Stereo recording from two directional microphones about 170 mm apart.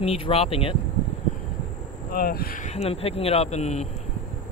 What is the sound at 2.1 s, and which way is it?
Speech, 60° left (ahead or behind).